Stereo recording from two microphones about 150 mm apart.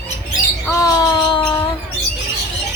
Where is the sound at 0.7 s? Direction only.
25° left (ahead or behind).